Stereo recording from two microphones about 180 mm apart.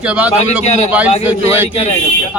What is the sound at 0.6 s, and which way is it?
Speech, 40° left (ahead or behind).